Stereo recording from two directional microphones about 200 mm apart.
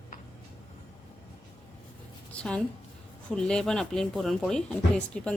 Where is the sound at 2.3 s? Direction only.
5° left (ahead or behind).